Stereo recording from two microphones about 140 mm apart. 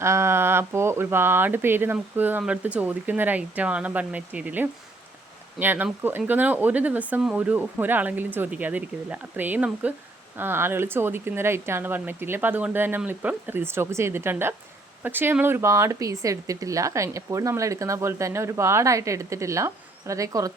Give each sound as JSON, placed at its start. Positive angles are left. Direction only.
{"t": 0.0, "sound": "speech", "side_deg": -20}